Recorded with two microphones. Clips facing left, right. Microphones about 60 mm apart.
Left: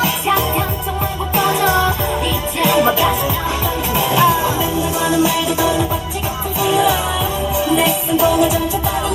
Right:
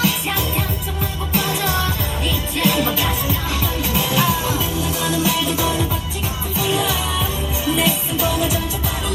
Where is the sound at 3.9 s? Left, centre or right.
Left.